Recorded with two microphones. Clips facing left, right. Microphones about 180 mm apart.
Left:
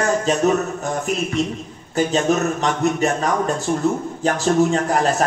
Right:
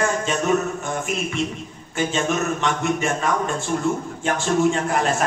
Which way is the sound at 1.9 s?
40° left (ahead or behind).